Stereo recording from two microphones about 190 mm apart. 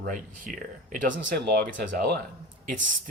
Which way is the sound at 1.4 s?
60° right (ahead or behind).